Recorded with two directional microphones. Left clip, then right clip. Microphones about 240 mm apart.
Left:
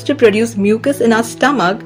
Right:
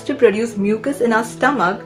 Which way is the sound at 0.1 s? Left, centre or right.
Left.